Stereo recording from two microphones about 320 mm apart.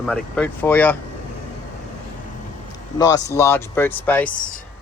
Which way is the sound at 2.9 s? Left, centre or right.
Centre.